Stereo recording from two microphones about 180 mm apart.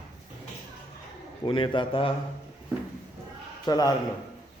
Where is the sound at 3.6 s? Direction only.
20° left (ahead or behind).